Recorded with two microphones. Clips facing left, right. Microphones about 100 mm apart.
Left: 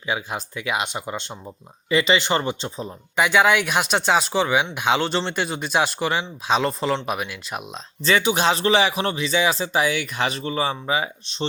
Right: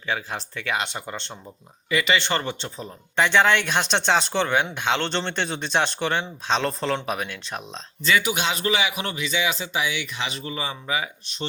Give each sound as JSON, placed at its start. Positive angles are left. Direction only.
{"t": 0.0, "sound": "speech", "side_deg": 15}
{"t": 8.0, "sound": "speech", "side_deg": 30}